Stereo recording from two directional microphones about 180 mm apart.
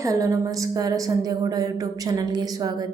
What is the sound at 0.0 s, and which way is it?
A woman's voice, 20° right (ahead or behind).